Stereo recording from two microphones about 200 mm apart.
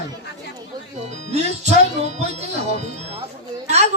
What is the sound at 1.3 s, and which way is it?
Speech, 35° right (ahead or behind).